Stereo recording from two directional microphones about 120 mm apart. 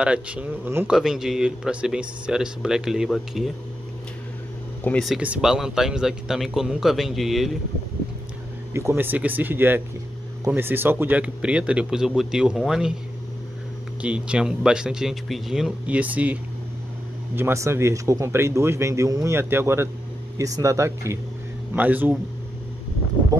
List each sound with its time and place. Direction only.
0.0 s speech: 10° right (ahead or behind)
0.8 s speech: 5° right (ahead or behind)
4.9 s speech: 15° left (ahead or behind)
5.2 s speech: 10° right (ahead or behind)
8.7 s speech: 20° right (ahead or behind); by 12.9 s 5° right (ahead or behind)
14.0 s speech: 10° right (ahead or behind)
17.4 s a man's voice: 20° right (ahead or behind)
21.7 s speech: 15° right (ahead or behind)